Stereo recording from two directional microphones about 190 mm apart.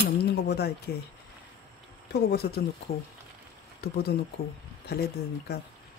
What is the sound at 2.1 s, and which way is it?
Speech, 55° left (ahead or behind).